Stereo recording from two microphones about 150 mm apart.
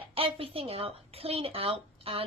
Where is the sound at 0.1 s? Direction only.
40° right (ahead or behind).